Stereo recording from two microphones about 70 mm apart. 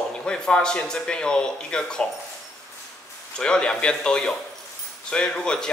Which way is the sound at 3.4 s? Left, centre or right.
Centre.